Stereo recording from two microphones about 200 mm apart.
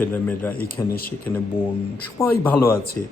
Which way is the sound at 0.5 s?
50° left (ahead or behind).